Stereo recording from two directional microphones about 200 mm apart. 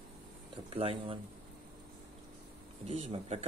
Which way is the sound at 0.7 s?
30° right (ahead or behind).